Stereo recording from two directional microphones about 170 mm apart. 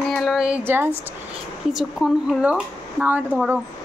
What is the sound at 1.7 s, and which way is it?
Speech, centre (ahead or behind).